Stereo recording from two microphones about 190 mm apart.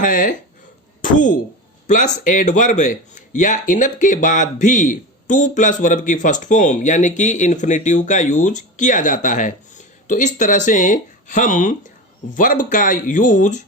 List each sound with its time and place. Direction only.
0.0 s speech: 45° left (ahead or behind)